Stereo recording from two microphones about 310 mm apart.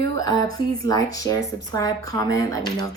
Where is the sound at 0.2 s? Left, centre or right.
Centre.